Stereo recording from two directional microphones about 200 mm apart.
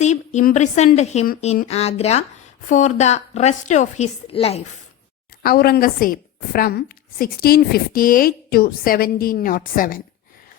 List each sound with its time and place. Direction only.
0.0 s a woman's voice: 35° left (ahead or behind)
5.4 s a woman's voice: 50° left (ahead or behind)